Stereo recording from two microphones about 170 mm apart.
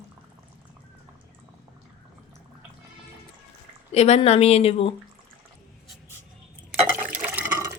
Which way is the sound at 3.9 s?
40° left (ahead or behind).